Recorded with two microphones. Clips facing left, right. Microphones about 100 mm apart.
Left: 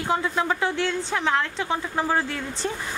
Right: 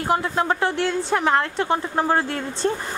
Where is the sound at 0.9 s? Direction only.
15° right (ahead or behind).